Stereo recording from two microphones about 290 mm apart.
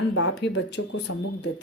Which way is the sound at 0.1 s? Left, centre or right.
Left.